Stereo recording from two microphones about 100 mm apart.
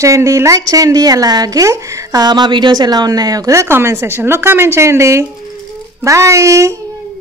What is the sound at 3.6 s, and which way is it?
A woman's voice, 25° right (ahead or behind).